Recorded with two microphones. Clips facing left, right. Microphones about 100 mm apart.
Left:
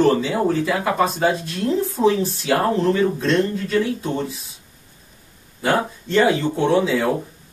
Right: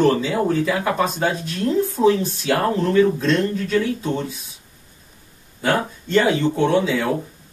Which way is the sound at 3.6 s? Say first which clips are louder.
Even; centre (ahead or behind).